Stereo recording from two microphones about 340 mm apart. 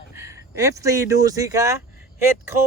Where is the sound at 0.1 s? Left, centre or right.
Centre.